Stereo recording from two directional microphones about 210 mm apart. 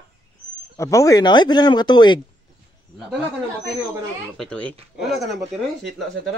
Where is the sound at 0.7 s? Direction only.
15° left (ahead or behind).